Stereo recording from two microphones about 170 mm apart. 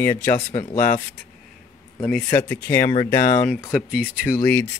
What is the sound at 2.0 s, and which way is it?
Speech, 5° left (ahead or behind).